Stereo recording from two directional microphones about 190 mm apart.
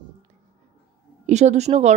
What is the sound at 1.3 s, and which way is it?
Speech, 35° right (ahead or behind).